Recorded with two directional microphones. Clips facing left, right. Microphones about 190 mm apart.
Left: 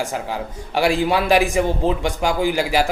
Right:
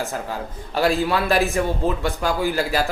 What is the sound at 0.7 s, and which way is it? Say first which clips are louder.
A man's voice: left 2 dB; 15° left (ahead or behind).